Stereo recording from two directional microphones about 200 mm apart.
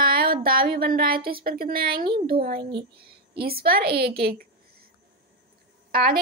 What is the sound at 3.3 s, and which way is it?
Speech, 50° right (ahead or behind).